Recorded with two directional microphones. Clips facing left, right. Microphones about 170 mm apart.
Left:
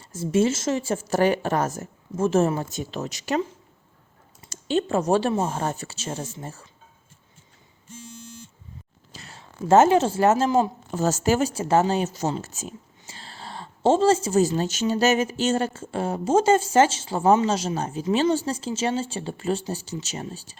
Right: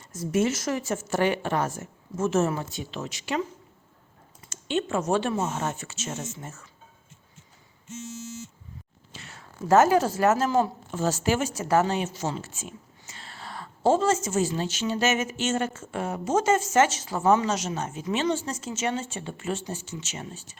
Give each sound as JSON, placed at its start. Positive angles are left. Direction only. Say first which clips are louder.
{"t": 0.0, "sound": "speech", "louder": "left 3 dB", "side_deg": 30}
{"t": 4.4, "sound": "speech", "louder": "left 4 dB", "side_deg": 35}
{"t": 8.1, "sound": "buzzer", "louder": "right 5 dB", "side_deg": -5}
{"t": 9.1, "sound": "a woman's voice", "louder": "left 3 dB", "side_deg": 35}
{"t": 10.9, "sound": "speech", "louder": "left 3 dB", "side_deg": 40}